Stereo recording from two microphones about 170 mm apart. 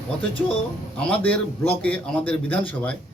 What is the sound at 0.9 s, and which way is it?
A man's voice, 5° left (ahead or behind).